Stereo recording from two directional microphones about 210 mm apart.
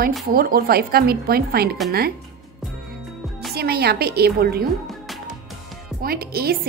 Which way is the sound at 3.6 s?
50° right (ahead or behind).